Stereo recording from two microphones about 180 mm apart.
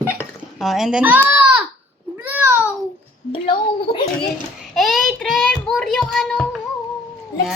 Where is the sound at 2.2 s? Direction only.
10° right (ahead or behind).